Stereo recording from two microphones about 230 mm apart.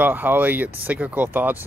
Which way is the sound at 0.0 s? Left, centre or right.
Centre.